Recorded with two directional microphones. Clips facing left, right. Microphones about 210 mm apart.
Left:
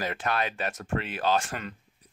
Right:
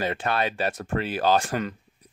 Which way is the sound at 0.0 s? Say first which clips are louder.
Right 4 dB; 30° right (ahead or behind).